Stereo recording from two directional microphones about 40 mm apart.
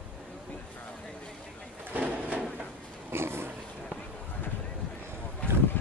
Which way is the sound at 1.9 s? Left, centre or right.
Right.